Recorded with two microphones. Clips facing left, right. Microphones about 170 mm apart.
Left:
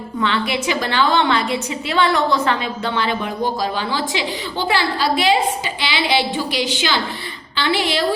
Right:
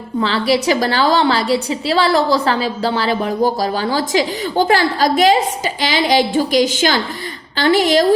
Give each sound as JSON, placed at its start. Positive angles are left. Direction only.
{"t": 0.2, "sound": "a woman's voice", "side_deg": -35}